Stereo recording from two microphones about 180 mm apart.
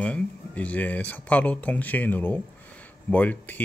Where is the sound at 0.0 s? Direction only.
5° left (ahead or behind).